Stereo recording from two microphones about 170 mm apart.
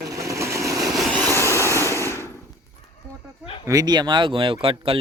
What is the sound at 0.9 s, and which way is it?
Vehicle, 5° left (ahead or behind).